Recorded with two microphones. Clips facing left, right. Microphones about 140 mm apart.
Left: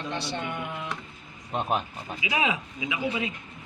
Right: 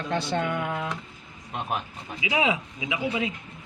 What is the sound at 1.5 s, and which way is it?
Speech, 15° left (ahead or behind).